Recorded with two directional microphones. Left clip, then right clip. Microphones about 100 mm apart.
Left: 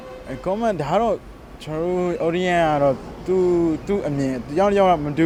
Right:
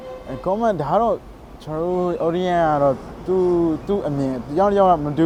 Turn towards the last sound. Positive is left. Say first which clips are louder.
# right 1 dB
turn(degrees=0)  # may be behind; listen again after turning